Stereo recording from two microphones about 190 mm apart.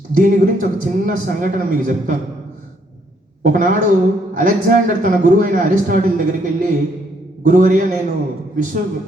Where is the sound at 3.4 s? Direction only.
45° right (ahead or behind).